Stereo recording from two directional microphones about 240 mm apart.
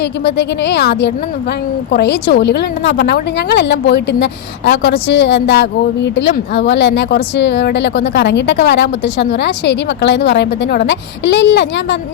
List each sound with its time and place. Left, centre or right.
0.3 s a woman's voice: left